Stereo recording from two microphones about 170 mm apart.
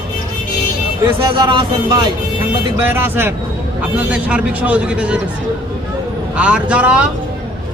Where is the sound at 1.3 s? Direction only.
30° right (ahead or behind).